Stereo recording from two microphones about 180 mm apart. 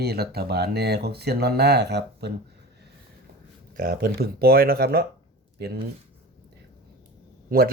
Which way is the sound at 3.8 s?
55° right (ahead or behind).